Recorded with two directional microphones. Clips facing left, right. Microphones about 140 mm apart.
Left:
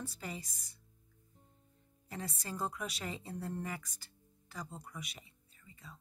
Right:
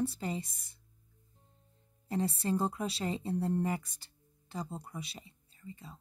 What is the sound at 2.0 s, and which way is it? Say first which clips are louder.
Speech: right 11 dB; 30° right (ahead or behind).